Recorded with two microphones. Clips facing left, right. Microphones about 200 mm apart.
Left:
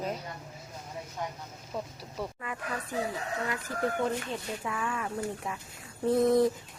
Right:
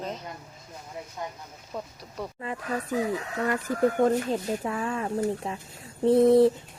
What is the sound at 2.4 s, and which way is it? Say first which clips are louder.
Speech: right 5 dB; 30° right (ahead or behind).